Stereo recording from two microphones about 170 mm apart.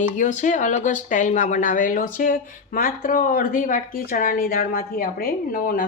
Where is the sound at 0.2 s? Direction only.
45° left (ahead or behind).